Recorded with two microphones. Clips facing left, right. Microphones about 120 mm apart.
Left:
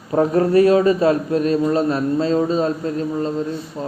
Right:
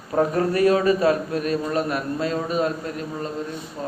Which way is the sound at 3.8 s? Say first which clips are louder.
Left 2 dB; 20° left (ahead or behind).